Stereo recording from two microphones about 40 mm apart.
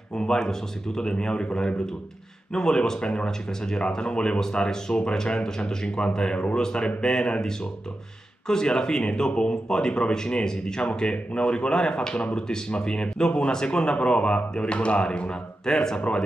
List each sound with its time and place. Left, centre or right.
0.1 s speech: centre